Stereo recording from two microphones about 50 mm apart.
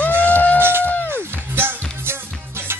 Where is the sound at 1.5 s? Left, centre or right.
Right.